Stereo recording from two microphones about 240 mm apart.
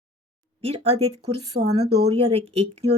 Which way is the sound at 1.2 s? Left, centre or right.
Right.